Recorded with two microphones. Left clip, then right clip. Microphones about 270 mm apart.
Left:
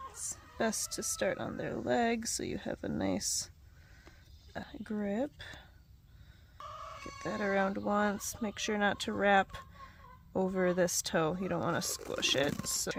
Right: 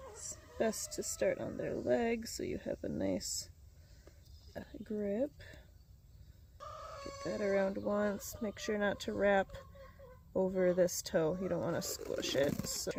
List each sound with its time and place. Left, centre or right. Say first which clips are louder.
0.3 s speech: left 1 dB; left
4.5 s speech: left 1 dB; left
7.2 s speech: left 2 dB; left